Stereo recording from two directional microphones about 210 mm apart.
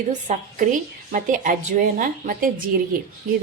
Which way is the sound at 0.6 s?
40° right (ahead or behind).